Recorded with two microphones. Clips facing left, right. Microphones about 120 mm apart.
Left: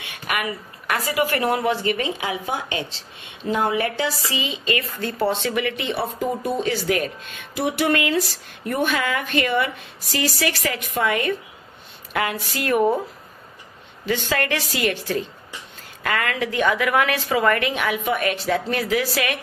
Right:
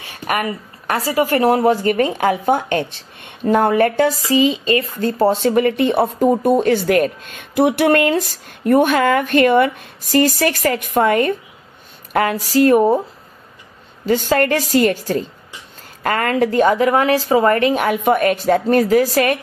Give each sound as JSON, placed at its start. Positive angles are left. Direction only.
{"t": 0.0, "sound": "a woman's voice", "side_deg": -40}
{"t": 14.0, "sound": "a woman's voice", "side_deg": -40}